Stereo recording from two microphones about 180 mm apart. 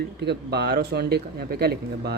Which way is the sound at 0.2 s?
65° right (ahead or behind).